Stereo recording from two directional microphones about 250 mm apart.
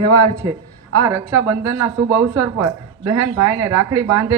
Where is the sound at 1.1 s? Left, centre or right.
Centre.